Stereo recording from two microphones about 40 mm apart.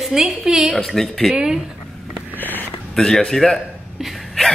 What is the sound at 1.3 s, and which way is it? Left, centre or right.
Speech, right.